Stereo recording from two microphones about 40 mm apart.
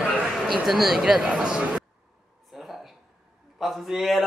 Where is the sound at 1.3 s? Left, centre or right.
Right.